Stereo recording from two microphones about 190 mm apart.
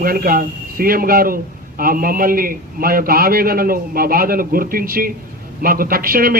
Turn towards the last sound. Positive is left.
turn(degrees=-50)  # may be behind; listen again after turning